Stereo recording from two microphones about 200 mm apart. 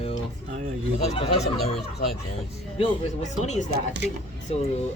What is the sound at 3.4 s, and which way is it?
Speech, 35° left (ahead or behind).